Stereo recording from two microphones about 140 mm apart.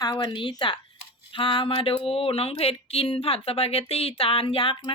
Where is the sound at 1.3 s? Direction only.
40° left (ahead or behind).